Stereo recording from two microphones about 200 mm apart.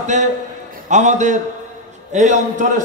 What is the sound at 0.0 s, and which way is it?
A man's voice, 35° right (ahead or behind).